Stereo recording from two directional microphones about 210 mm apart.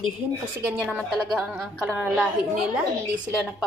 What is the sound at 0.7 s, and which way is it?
A woman's voice, centre (ahead or behind).